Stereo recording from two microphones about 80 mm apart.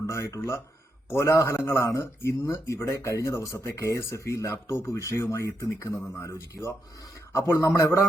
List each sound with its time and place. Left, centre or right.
0.1 s speech: left